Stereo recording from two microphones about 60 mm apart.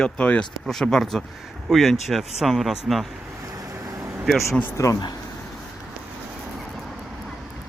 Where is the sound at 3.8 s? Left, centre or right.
Right.